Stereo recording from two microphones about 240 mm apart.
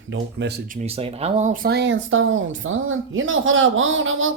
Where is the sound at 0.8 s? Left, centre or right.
Right.